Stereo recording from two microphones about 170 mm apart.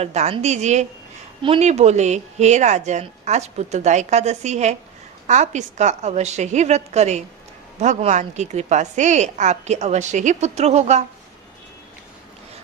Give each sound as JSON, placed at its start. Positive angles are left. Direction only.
{"t": 0.0, "sound": "a woman's voice", "side_deg": -40}